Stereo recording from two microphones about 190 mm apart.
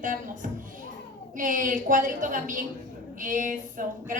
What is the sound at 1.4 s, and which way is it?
A woman's voice, 45° right (ahead or behind).